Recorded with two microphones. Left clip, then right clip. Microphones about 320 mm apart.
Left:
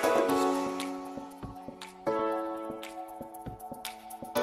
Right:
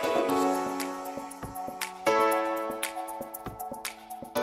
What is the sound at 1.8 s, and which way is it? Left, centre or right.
Music, right.